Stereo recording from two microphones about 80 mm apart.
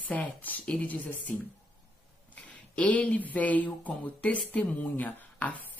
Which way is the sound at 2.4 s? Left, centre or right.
Centre.